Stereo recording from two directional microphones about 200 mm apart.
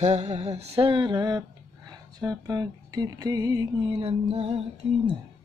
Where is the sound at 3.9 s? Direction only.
30° right (ahead or behind).